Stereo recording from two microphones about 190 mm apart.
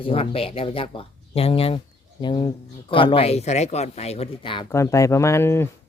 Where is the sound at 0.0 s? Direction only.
30° left (ahead or behind).